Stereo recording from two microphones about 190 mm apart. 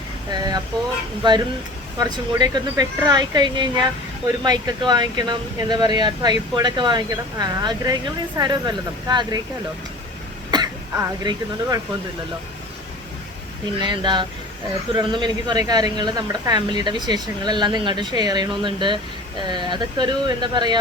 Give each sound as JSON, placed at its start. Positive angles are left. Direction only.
{"t": 0.3, "sound": "a sound", "side_deg": -20}
{"t": 1.2, "sound": "a woman's voice", "side_deg": -25}
{"t": 10.5, "sound": "throat clearing", "side_deg": -20}
{"t": 10.9, "sound": "a woman's voice", "side_deg": -20}
{"t": 13.8, "sound": "a woman's voice", "side_deg": -25}